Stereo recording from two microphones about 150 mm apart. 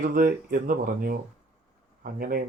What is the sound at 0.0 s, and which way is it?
Speech, 70° right (ahead or behind).